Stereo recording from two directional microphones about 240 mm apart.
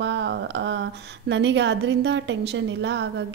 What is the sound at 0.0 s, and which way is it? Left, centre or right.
A woman's voice, right.